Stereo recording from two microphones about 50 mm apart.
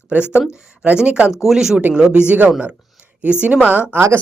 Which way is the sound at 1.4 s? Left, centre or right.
Centre.